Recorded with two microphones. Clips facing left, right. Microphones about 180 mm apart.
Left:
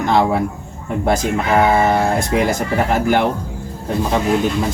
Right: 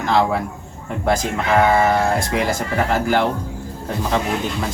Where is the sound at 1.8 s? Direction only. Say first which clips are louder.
Left 2 dB; 20° left (ahead or behind).